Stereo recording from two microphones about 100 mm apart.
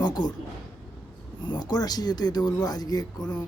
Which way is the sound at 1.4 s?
45° left (ahead or behind).